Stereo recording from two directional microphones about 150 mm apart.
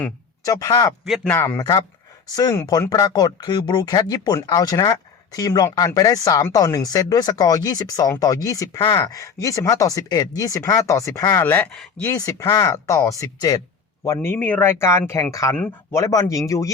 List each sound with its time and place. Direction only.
0.4 s speech: 25° left (ahead or behind)
11.4 s speech: 10° left (ahead or behind)